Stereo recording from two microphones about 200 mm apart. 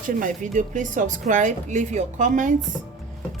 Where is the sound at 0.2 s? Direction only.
40° right (ahead or behind).